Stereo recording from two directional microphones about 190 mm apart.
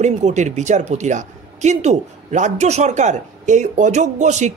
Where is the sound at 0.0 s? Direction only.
40° right (ahead or behind).